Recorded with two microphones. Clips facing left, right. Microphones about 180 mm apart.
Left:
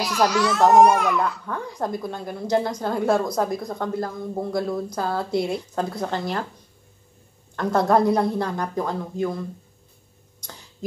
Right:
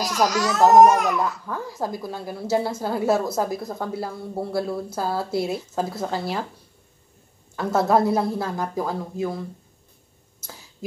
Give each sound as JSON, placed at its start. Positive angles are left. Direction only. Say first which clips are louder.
{"t": 0.3, "sound": "a child's voice", "louder": "left 2 dB", "side_deg": -40}
{"t": 0.6, "sound": "a woman's voice", "louder": "right 2 dB", "side_deg": -5}
{"t": 0.8, "sound": "a child's voice", "louder": "right 1 dB", "side_deg": -40}
{"t": 1.2, "sound": "a woman's voice", "louder": "even", "side_deg": -5}
{"t": 7.5, "sound": "a woman's voice", "louder": "left 1 dB", "side_deg": -5}
{"t": 10.4, "sound": "a sound", "louder": "even", "side_deg": -5}